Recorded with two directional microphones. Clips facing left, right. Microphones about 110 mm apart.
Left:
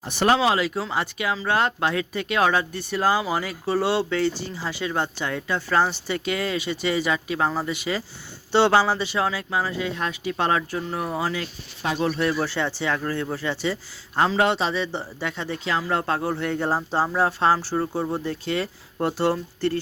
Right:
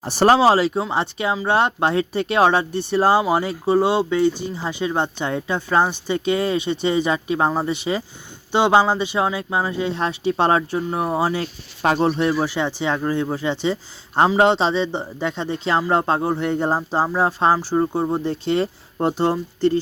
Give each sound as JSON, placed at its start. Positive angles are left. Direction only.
{"t": 0.0, "sound": "speech", "side_deg": -35}